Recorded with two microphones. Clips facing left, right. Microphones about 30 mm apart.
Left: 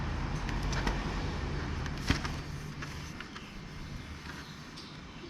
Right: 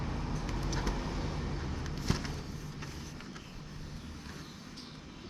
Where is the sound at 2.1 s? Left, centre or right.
Centre.